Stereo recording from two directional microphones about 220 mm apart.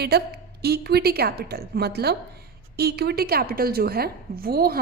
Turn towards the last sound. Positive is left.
turn(degrees=-45)  # may be behind; listen again after turning